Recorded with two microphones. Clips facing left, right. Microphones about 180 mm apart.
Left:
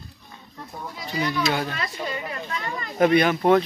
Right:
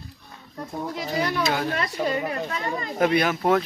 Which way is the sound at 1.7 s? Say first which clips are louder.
Right 5 dB; 50° right (ahead or behind).